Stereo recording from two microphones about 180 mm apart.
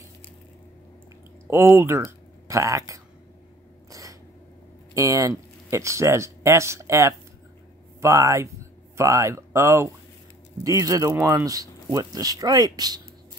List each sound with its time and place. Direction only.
1.5 s speech: 15° right (ahead or behind)
3.9 s cat: 20° right (ahead or behind)
4.9 s speech: 20° right (ahead or behind)